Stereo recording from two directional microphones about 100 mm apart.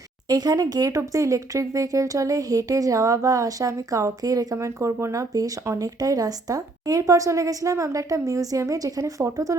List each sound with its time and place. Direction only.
0.3 s speech: 40° right (ahead or behind)
4.5 s speech: 30° right (ahead or behind)